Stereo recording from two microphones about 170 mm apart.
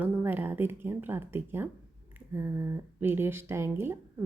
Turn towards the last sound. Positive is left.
turn(degrees=-15)  # may be behind; listen again after turning